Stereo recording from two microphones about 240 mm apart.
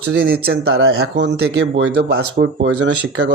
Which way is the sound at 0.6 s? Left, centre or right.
Right.